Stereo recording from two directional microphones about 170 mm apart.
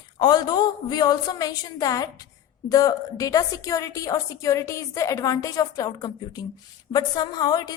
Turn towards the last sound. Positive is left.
turn(degrees=25)  # may be behind; listen again after turning